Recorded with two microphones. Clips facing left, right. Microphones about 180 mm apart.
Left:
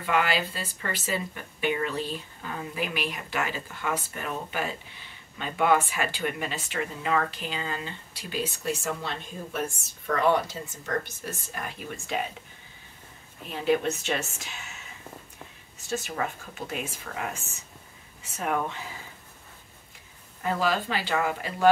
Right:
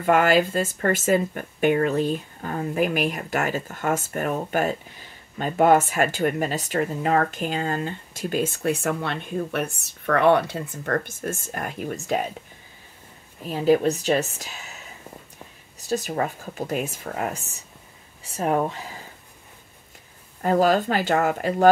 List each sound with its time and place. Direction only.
0.0 s speech: 50° right (ahead or behind)
13.4 s speech: 40° right (ahead or behind)
15.9 s speech: 35° right (ahead or behind)
20.4 s speech: 45° right (ahead or behind)